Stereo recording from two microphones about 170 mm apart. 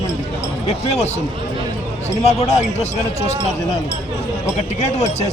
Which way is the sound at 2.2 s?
40° left (ahead or behind).